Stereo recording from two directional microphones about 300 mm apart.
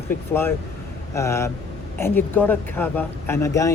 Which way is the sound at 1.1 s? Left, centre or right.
Centre.